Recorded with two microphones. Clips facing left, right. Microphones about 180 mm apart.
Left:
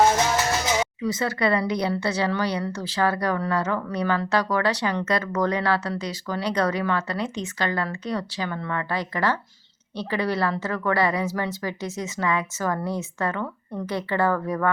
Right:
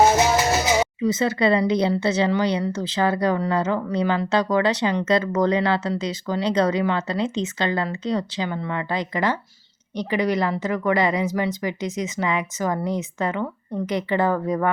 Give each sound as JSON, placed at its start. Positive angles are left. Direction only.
{"t": 0.0, "sound": "music", "side_deg": -10}
{"t": 0.8, "sound": "a woman's voice", "side_deg": -25}